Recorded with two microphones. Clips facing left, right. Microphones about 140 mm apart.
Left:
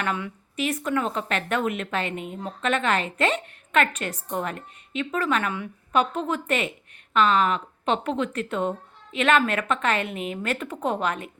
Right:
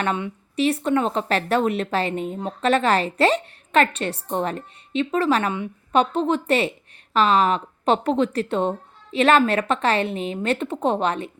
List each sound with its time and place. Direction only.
0.0 s a woman's voice: 30° right (ahead or behind)